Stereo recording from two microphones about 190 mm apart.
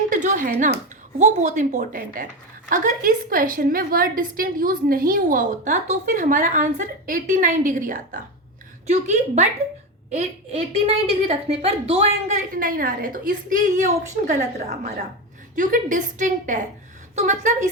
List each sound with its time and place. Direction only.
0.1 s a woman's voice: 45° right (ahead or behind)
12.5 s a woman's voice: 45° right (ahead or behind)